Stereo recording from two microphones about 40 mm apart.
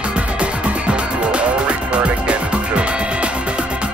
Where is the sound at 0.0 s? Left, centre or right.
Right.